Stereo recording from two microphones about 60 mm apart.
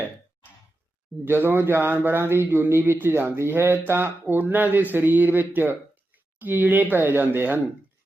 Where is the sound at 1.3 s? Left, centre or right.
Right.